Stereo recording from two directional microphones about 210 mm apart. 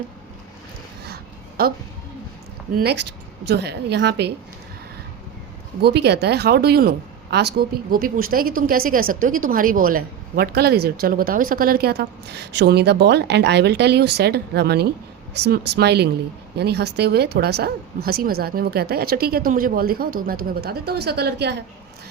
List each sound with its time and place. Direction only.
1.0 s a sound: 50° right (ahead or behind)
2.7 s a woman's voice: 50° right (ahead or behind)
5.8 s a woman's voice: 50° right (ahead or behind)